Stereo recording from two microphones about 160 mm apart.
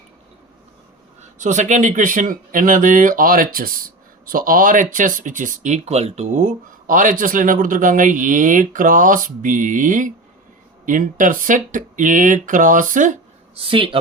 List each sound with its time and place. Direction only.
1.2 s speech: 50° right (ahead or behind)
13.6 s speech: 35° right (ahead or behind)